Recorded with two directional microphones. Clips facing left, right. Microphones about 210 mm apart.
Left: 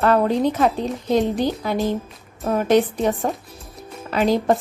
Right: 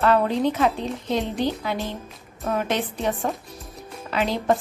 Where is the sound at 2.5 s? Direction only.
40° left (ahead or behind).